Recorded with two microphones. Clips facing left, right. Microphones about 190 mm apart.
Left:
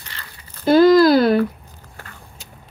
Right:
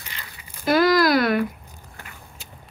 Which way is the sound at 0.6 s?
30° left (ahead or behind).